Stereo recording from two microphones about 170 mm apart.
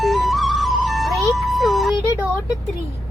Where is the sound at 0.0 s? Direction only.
Centre (ahead or behind).